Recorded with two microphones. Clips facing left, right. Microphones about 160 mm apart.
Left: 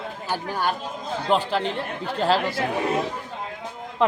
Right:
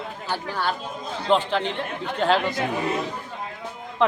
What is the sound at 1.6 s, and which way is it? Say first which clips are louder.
Speech: left 1 dB; 40° left (ahead or behind).